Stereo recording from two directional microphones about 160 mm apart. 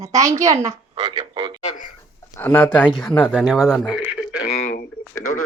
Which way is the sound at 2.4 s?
15° left (ahead or behind).